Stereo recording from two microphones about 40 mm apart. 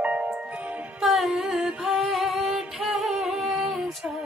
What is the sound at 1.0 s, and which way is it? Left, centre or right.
Music, centre.